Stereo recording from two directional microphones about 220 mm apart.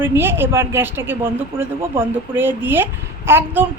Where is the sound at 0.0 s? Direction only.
10° right (ahead or behind).